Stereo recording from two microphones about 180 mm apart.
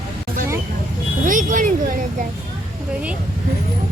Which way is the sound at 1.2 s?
45° right (ahead or behind).